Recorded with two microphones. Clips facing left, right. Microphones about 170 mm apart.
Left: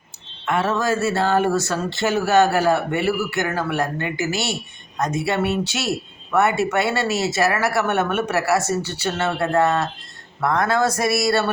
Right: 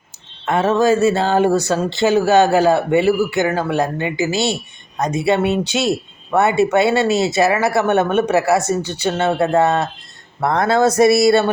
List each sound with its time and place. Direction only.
0.4 s speech: 20° right (ahead or behind)
10.4 s speech: 30° right (ahead or behind)